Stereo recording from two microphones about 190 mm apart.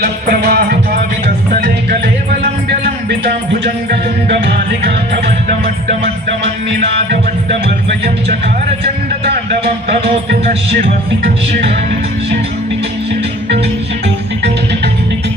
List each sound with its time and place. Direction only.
0.0 s music: 55° right (ahead or behind)
4.3 s music: 60° right (ahead or behind)
6.4 s music: 65° right (ahead or behind)
8.8 s speech: 55° right (ahead or behind)
10.8 s music: 55° right (ahead or behind)